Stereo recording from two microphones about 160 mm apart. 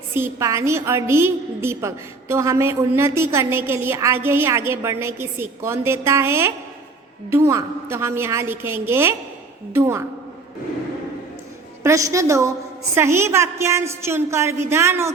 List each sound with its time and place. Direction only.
0.1 s a woman's voice: 15° right (ahead or behind)
11.8 s a woman's voice: 20° right (ahead or behind)